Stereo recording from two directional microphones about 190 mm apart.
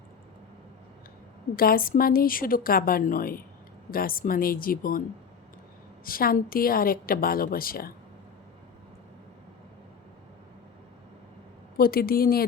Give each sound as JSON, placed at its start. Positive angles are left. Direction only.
{"t": 1.5, "sound": "a woman's voice", "side_deg": 50}
{"t": 6.1, "sound": "a woman's voice", "side_deg": 50}
{"t": 11.8, "sound": "a woman's voice", "side_deg": 50}